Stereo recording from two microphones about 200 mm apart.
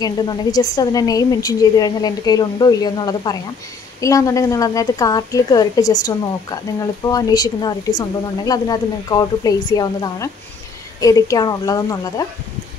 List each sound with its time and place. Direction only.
0.0 s a woman's voice: 20° left (ahead or behind)